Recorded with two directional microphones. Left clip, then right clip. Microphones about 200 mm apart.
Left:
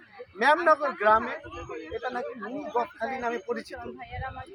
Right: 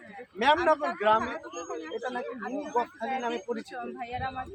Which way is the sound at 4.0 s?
50° right (ahead or behind).